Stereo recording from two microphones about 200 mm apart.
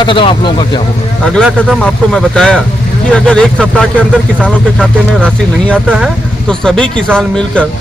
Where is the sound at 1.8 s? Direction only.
5° left (ahead or behind).